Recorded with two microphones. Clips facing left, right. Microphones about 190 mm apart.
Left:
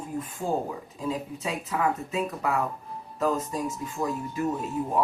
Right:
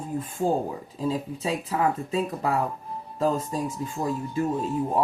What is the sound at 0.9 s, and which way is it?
Speech, 30° right (ahead or behind).